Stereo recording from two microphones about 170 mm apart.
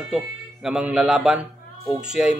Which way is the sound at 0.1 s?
5° right (ahead or behind).